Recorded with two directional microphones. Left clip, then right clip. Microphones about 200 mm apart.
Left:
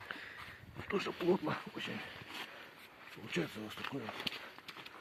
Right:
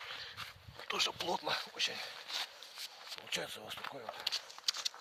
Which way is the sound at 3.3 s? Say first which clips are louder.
Left 1 dB; 50° right (ahead or behind).